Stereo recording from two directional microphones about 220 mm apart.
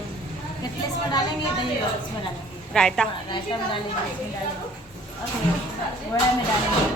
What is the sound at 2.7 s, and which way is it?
Speech, 5° left (ahead or behind).